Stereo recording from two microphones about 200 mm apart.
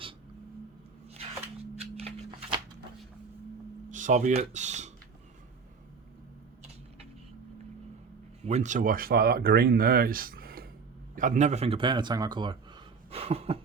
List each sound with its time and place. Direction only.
1.7 s shuffling cards: 30° right (ahead or behind)
3.8 s speech: 40° right (ahead or behind)
8.4 s speech: 35° right (ahead or behind)